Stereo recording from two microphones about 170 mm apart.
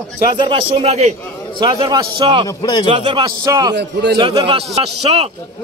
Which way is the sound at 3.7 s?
80° right.